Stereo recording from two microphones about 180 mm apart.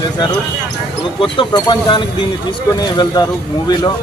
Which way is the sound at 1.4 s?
25° left (ahead or behind).